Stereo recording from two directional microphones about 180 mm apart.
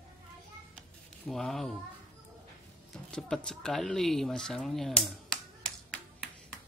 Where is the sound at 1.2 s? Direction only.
Centre (ahead or behind).